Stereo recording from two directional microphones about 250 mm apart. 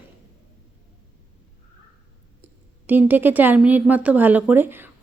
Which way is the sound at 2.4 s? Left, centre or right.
Centre.